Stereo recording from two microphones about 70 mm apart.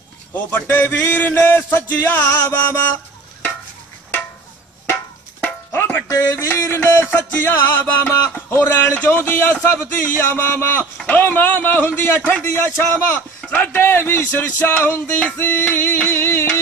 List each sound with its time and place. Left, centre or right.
0.7 s speech: left
5.4 s music: left
6.0 s speech: left
6.3 s speech: left
13.1 s speech: left